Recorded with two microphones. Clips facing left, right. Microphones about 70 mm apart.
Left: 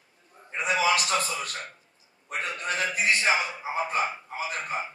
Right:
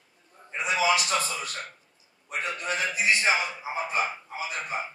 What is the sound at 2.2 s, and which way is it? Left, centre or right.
A man's voice, left.